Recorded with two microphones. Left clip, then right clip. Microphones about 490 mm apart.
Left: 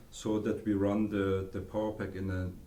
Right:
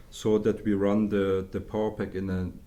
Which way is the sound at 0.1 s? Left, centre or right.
Right.